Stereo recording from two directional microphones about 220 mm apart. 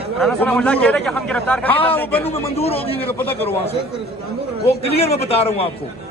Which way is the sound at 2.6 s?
25° left (ahead or behind).